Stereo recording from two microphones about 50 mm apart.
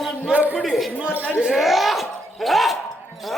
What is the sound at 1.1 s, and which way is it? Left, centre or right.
Speech, left.